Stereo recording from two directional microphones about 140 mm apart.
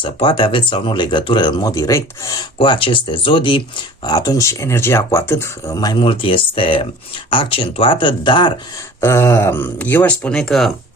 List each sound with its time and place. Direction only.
0.0 s speech: 35° left (ahead or behind)
2.6 s speech: 40° left (ahead or behind)
6.0 s speech: 40° left (ahead or behind)
9.0 s speech: 20° left (ahead or behind); by 10.7 s 5° left (ahead or behind)